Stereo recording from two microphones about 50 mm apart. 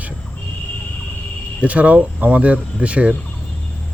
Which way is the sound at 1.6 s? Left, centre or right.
Right.